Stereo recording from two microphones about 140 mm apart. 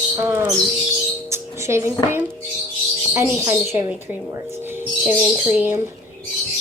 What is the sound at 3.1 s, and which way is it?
Speech, 20° right (ahead or behind).